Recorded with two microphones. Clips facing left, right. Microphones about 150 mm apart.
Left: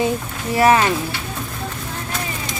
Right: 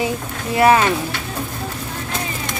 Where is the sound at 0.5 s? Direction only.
20° right (ahead or behind).